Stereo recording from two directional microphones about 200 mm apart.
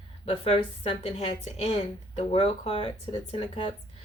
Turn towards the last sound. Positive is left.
turn(degrees=30)  # may be behind; listen again after turning